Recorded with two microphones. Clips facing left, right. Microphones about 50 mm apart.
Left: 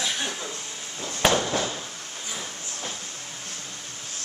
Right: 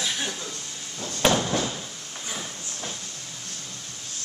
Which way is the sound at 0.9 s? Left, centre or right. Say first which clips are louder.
Even; centre.